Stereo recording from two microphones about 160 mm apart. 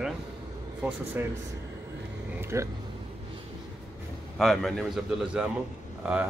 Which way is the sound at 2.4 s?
15° right (ahead or behind).